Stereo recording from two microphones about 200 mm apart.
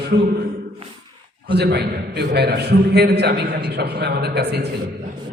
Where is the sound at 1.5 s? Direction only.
55° right (ahead or behind).